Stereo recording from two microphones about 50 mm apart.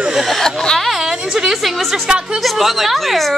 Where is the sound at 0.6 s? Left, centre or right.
Centre.